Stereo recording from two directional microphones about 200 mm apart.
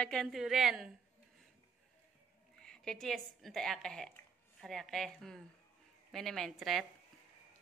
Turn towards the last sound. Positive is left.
turn(degrees=0)  # may be behind; listen again after turning